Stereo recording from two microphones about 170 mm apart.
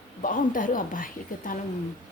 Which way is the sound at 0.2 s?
55° left (ahead or behind).